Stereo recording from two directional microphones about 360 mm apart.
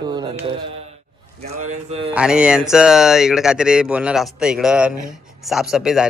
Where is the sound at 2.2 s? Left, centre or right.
Centre.